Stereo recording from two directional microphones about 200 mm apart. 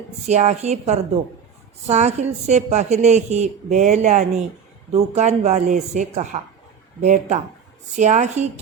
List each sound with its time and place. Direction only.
0.3 s speech: 35° right (ahead or behind)